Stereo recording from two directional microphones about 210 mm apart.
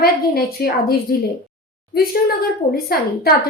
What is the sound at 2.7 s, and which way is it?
Speech, 45° left (ahead or behind).